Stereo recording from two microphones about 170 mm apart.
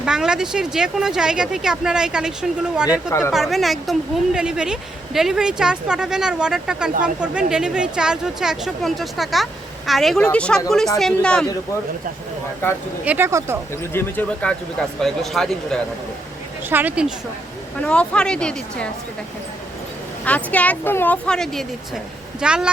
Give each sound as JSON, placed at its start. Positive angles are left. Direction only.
{"t": 0.0, "sound": "a woman's voice", "side_deg": -5}
{"t": 2.9, "sound": "a woman's voice", "side_deg": 15}
{"t": 3.3, "sound": "a woman's voice", "side_deg": 0}
{"t": 13.1, "sound": "speech", "side_deg": -15}
{"t": 13.9, "sound": "a woman's voice", "side_deg": 10}
{"t": 16.6, "sound": "speech", "side_deg": -10}
{"t": 17.7, "sound": "a woman's voice", "side_deg": 5}
{"t": 20.2, "sound": "a woman's voice", "side_deg": 10}